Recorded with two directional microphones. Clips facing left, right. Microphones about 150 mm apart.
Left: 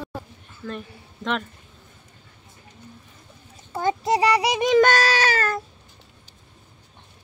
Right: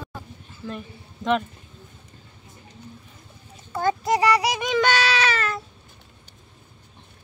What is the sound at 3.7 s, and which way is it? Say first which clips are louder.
Child singing: even; 25° left (ahead or behind).